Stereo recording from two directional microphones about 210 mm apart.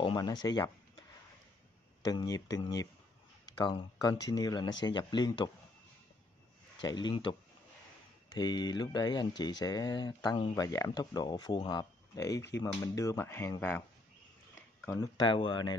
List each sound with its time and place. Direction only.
0.0 s speech: 20° left (ahead or behind)
2.0 s speech: 20° left (ahead or behind)
6.8 s speech: 20° left (ahead or behind)
14.9 s speech: 20° left (ahead or behind)